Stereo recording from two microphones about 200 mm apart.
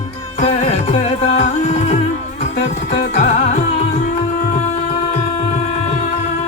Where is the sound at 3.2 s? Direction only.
35° left (ahead or behind).